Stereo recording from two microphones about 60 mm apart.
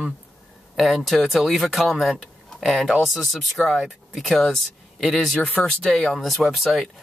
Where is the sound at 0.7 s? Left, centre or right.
Centre.